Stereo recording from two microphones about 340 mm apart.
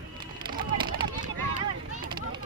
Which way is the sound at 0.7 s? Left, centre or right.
Centre.